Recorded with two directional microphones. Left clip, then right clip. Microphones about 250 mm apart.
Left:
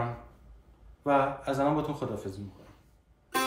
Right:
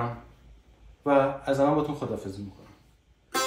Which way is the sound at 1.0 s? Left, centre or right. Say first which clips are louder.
Right 3 dB; centre.